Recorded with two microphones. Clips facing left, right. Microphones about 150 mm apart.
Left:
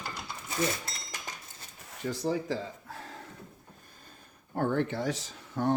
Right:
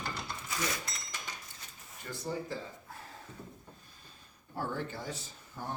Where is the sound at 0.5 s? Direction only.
25° left (ahead or behind).